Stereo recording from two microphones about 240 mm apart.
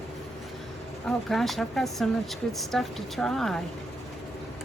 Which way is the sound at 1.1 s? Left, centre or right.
Centre.